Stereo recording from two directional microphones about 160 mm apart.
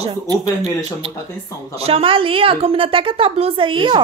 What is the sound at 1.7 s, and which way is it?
A woman's voice, 35° right (ahead or behind).